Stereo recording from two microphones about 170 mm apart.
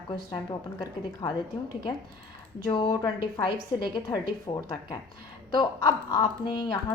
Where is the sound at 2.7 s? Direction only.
25° left (ahead or behind).